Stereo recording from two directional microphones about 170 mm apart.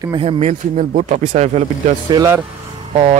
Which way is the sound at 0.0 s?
30° right (ahead or behind).